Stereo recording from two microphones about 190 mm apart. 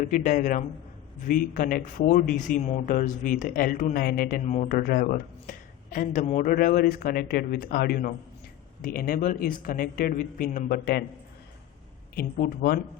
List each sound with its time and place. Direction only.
0.0 s speech: 40° left (ahead or behind)
12.1 s speech: 50° left (ahead or behind)